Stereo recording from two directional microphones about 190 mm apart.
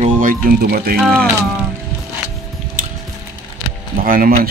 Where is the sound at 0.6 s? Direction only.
50° right (ahead or behind).